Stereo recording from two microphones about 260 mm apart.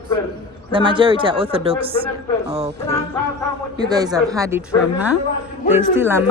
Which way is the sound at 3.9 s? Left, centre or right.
Centre.